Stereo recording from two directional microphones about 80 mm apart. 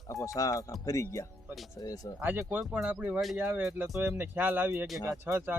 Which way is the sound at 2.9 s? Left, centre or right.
Right.